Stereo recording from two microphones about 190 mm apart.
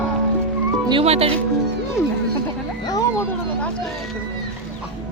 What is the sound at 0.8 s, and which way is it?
Speech, 30° right (ahead or behind).